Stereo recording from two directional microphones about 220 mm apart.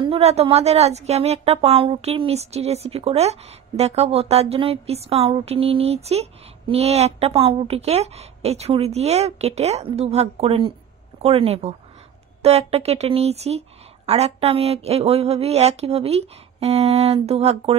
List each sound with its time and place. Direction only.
0.0 s a woman's voice: 25° right (ahead or behind)